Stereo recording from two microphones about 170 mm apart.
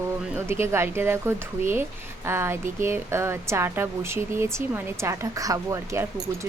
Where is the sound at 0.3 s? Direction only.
15° right (ahead or behind).